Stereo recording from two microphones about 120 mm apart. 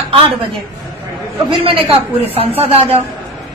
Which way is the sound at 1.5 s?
50° right (ahead or behind).